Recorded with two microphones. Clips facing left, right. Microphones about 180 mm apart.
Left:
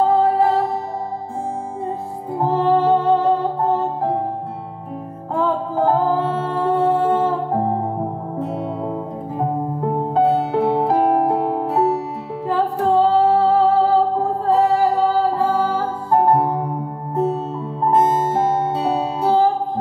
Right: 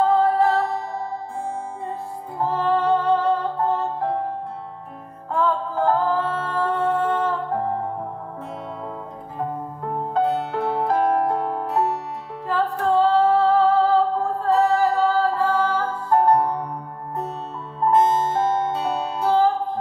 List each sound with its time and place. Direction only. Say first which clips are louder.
0.0 s music: left 2 dB; 10° left (ahead or behind)
2.3 s music: left 5 dB; 15° left (ahead or behind)
5.3 s music: left 2 dB; 15° left (ahead or behind)
6.8 s music: left 5 dB; 5° left (ahead or behind)
7.2 s music: left 4 dB; 20° left (ahead or behind)
9.4 s music: left 6 dB; 15° left (ahead or behind)